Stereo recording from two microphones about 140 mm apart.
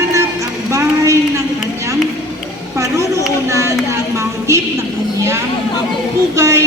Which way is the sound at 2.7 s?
20° right (ahead or behind).